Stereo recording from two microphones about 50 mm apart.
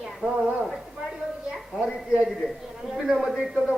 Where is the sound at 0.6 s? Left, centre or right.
Centre.